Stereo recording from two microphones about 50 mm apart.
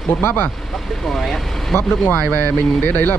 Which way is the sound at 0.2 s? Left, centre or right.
Left.